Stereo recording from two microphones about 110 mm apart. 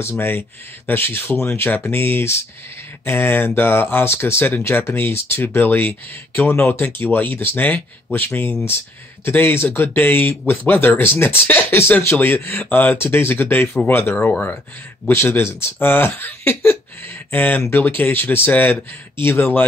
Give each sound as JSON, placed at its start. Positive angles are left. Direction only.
{"t": 0.1, "sound": "speech", "side_deg": 20}